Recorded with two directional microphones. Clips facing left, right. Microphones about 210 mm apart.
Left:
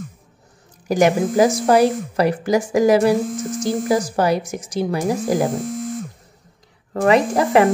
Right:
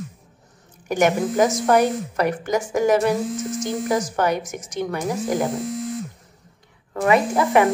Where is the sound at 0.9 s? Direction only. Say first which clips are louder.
Left 3 dB; 35° left (ahead or behind).